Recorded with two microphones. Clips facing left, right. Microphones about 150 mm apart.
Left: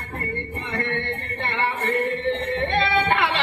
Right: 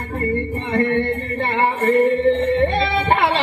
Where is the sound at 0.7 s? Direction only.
35° right (ahead or behind).